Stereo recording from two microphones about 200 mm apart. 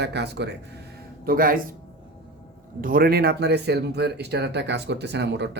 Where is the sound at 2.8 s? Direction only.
45° right (ahead or behind).